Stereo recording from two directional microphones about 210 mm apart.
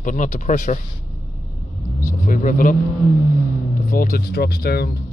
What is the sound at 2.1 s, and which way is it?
Vehicle, 40° left (ahead or behind).